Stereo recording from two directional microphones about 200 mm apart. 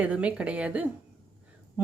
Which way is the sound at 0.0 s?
5° right (ahead or behind).